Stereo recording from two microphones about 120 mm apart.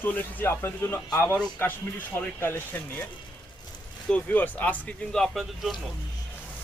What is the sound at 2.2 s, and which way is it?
Speech, 20° left (ahead or behind).